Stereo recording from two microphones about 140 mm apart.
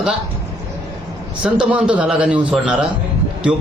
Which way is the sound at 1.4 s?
10° right (ahead or behind).